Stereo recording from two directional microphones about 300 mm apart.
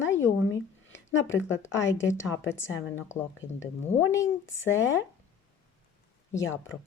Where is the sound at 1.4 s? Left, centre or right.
Left.